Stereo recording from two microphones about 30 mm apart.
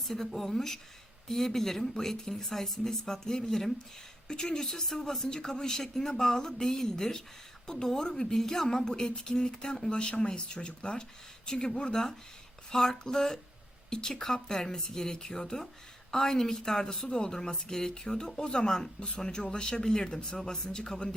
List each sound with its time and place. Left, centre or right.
0.1 s speech: centre
4.3 s speech: left
9.9 s speech: left